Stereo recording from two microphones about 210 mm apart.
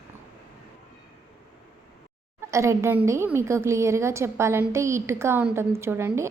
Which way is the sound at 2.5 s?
15° right (ahead or behind).